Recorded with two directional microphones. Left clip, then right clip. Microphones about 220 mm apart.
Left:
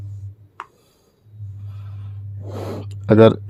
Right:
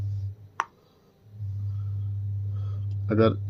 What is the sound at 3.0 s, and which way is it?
Speech, 50° left (ahead or behind).